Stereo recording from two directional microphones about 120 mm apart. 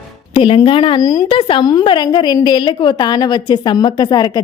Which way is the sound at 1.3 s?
45° left (ahead or behind).